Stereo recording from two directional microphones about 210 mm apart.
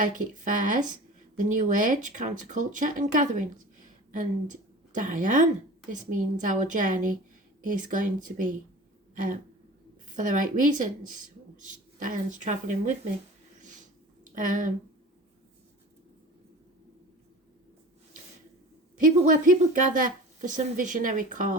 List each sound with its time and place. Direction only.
0.0 s speech: 40° right (ahead or behind)
9.1 s a sound: 40° right (ahead or behind)
10.2 s speech: 40° right (ahead or behind)
13.6 s a sound: 35° right (ahead or behind)
14.3 s speech: 40° right (ahead or behind)
18.9 s speech: 40° right (ahead or behind)